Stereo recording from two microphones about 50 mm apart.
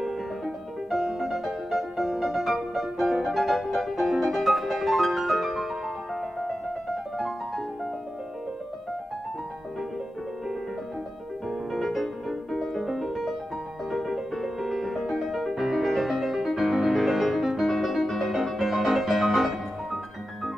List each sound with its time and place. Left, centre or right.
0.8 s music: centre
11.4 s music: centre